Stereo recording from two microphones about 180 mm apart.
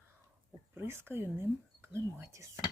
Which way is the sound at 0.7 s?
15° right (ahead or behind).